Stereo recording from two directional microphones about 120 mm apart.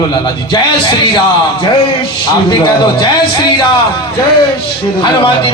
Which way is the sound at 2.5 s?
40° left (ahead or behind).